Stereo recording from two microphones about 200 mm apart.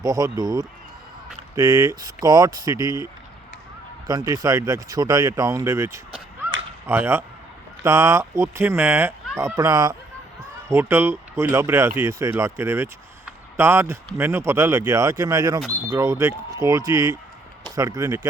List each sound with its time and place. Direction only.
0.0 s speech: 15° right (ahead or behind)
4.0 s speech: 20° right (ahead or behind)